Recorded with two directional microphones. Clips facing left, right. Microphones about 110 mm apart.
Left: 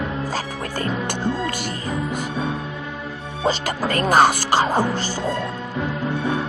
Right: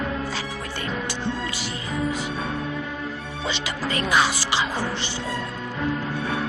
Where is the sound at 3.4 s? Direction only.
45° left (ahead or behind).